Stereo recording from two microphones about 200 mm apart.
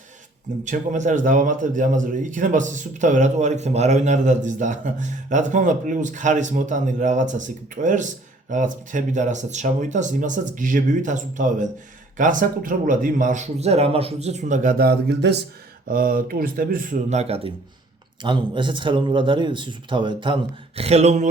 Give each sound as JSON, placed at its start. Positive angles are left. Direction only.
{"t": 0.6, "sound": "a man's voice", "side_deg": -40}
{"t": 15.9, "sound": "speech", "side_deg": -45}